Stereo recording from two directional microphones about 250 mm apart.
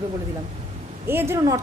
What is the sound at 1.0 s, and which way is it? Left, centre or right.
Speech, centre.